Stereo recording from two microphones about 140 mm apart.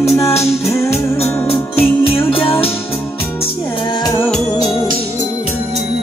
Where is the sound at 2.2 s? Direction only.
40° left (ahead or behind).